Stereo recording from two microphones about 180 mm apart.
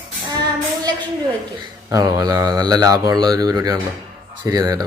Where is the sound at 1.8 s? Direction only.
20° right (ahead or behind).